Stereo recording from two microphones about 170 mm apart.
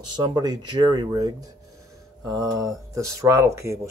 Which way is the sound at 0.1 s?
25° right (ahead or behind).